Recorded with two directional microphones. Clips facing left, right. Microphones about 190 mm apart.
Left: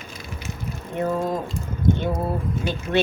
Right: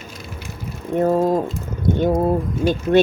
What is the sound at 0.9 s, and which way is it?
Ratchet, 40° right (ahead or behind).